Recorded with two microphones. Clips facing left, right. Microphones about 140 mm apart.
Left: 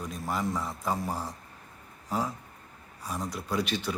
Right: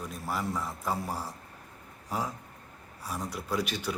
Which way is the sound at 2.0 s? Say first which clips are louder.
Left 2 dB; 10° right (ahead or behind).